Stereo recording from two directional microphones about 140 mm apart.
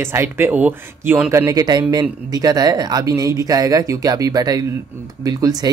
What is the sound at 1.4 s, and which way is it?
Speech, 25° right (ahead or behind).